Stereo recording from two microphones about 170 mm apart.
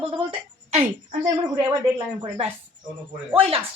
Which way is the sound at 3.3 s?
35° right (ahead or behind).